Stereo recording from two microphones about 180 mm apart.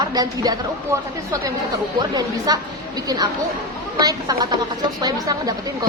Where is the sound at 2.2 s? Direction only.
20° right (ahead or behind).